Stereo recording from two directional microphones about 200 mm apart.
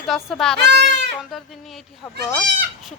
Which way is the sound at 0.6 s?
60° right (ahead or behind).